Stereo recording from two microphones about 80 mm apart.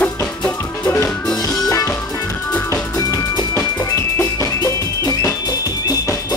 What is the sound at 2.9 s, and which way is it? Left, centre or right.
Music, left.